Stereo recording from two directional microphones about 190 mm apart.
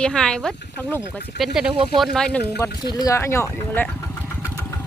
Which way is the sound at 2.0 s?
Centre (ahead or behind).